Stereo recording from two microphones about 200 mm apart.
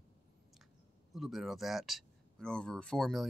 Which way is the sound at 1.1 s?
Centre (ahead or behind).